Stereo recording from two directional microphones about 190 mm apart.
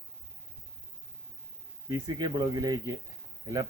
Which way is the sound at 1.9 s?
20° right (ahead or behind).